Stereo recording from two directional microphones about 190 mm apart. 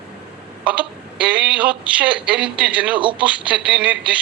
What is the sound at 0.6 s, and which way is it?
Speech, 5° right (ahead or behind).